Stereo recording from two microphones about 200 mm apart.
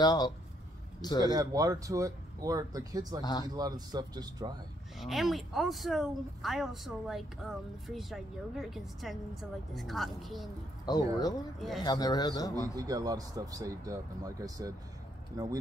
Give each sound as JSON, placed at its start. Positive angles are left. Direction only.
{"t": 0.0, "sound": "a man's voice", "side_deg": 20}
{"t": 1.2, "sound": "speech", "side_deg": -15}
{"t": 4.9, "sound": "speech", "side_deg": 0}
{"t": 10.9, "sound": "a man's voice", "side_deg": 20}
{"t": 12.7, "sound": "speech", "side_deg": -20}